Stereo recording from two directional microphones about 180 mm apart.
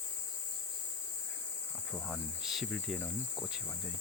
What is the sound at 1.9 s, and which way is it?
Cricket, centre (ahead or behind).